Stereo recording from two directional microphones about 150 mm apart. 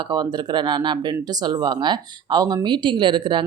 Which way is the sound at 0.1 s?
30° right (ahead or behind).